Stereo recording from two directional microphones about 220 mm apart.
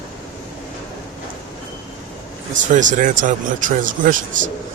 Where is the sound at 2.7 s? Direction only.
35° right (ahead or behind).